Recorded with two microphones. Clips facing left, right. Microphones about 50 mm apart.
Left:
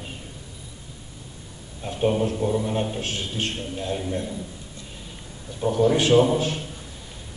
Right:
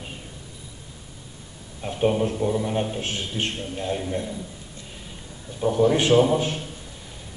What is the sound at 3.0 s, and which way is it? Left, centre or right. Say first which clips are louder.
A man's voice: even; right.